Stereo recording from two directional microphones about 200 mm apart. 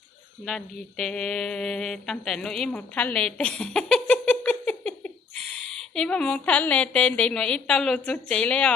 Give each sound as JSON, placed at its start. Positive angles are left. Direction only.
{"t": 0.4, "sound": "mantra", "side_deg": 0}
{"t": 5.9, "sound": "a woman's voice", "side_deg": 5}